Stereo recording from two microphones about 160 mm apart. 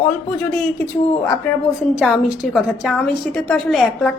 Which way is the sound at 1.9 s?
Centre (ahead or behind).